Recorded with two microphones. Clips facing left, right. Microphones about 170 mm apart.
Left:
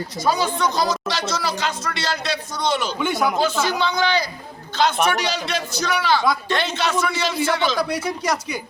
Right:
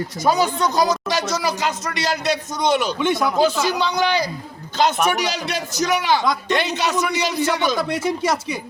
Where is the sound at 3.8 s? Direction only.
10° right (ahead or behind).